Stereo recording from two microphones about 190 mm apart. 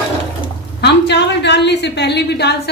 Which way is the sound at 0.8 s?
65° left (ahead or behind).